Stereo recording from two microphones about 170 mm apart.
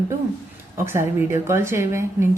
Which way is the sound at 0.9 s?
15° right (ahead or behind).